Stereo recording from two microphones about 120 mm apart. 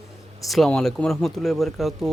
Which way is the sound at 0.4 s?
Centre (ahead or behind).